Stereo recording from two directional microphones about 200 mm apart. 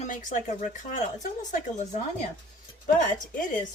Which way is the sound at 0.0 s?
35° left (ahead or behind).